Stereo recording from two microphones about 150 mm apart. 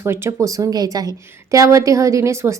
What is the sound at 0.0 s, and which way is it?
A woman's voice, 15° right (ahead or behind).